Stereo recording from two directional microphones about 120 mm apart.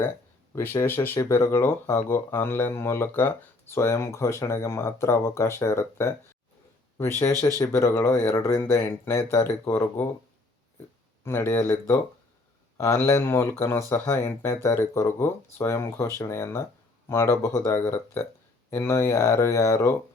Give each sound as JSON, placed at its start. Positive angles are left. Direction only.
{"t": 0.5, "sound": "speech", "side_deg": 20}
{"t": 11.2, "sound": "speech", "side_deg": 20}